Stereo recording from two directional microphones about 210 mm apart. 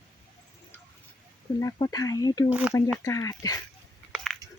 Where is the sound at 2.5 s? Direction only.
5° right (ahead or behind).